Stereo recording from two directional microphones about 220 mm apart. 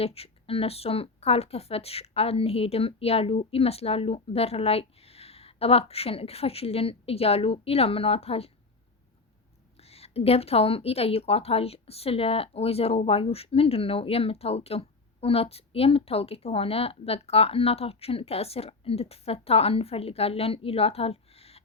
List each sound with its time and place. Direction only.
0.0 s a woman's voice: 25° left (ahead or behind)
9.7 s a woman's voice: 30° left (ahead or behind)